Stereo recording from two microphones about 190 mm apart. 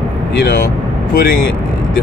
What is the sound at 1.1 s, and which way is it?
Speech, 50° left (ahead or behind).